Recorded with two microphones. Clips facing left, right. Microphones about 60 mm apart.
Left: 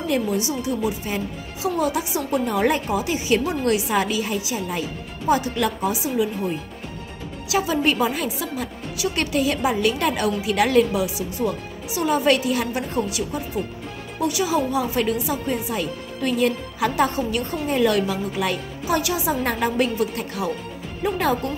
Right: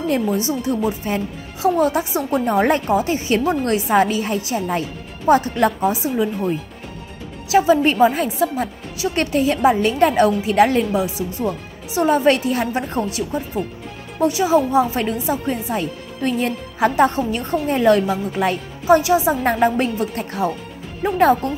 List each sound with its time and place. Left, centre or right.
0.1 s a woman's voice: right
7.4 s a woman's voice: right